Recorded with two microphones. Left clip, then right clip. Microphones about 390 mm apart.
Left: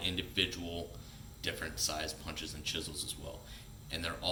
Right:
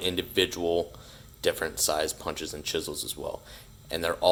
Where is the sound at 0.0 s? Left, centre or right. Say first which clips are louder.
Right 8 dB; centre.